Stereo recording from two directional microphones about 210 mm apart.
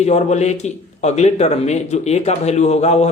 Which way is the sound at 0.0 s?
30° left (ahead or behind).